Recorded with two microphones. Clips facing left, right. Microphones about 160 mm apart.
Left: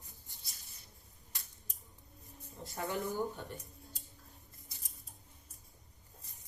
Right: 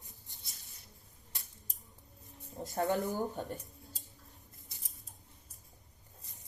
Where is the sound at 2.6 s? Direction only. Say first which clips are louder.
Right 5 dB; 40° right (ahead or behind).